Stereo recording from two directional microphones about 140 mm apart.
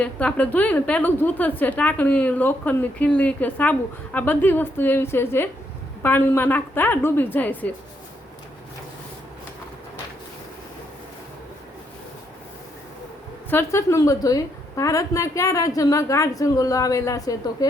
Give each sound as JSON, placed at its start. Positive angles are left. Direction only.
{"t": 0.0, "sound": "a woman's voice", "side_deg": 10}
{"t": 13.5, "sound": "a woman's voice", "side_deg": 20}